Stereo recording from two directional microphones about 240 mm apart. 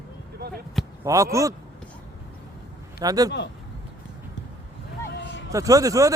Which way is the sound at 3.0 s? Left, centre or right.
Centre.